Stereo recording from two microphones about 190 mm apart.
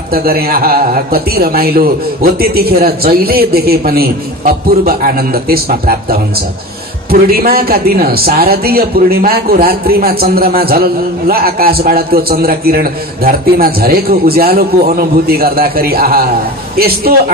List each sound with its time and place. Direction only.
0.1 s a man's voice: 50° right (ahead or behind)